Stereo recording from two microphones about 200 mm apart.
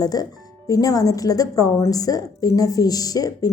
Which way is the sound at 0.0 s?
20° left (ahead or behind).